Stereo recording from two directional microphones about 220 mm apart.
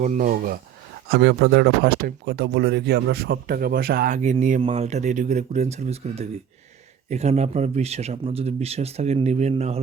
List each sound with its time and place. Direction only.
0.0 s speech: 35° right (ahead or behind)